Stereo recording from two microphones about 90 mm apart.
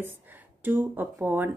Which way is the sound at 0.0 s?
20° right (ahead or behind).